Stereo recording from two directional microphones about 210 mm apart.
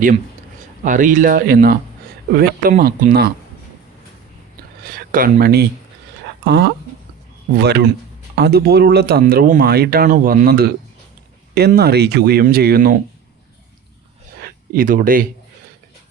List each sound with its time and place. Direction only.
0.9 s speech: 40° right (ahead or behind)
4.8 s speech: 45° right (ahead or behind)
14.4 s speech: 45° right (ahead or behind)